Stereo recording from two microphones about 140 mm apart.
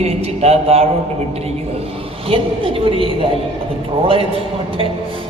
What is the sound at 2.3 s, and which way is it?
A man's voice, 40° right (ahead or behind).